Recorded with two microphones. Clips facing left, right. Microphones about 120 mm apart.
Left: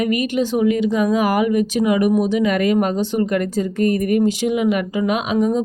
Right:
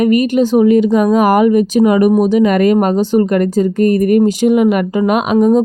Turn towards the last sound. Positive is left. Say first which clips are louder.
# right 6 dB
turn(degrees=-55)  # may be behind; listen again after turning